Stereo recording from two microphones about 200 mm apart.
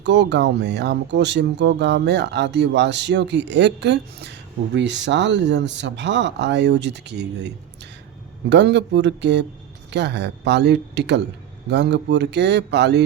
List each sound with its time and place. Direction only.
0.0 s speech: 60° right (ahead or behind)